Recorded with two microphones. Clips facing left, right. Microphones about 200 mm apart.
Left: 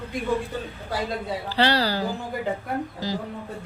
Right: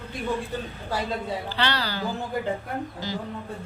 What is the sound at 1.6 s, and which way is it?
A woman's voice, 35° left (ahead or behind).